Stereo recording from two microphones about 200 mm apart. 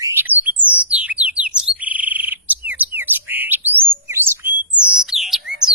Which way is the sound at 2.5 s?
10° right (ahead or behind).